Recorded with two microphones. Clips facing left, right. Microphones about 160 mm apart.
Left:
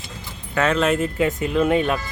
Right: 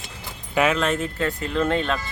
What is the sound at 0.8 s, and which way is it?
Speech, 5° left (ahead or behind).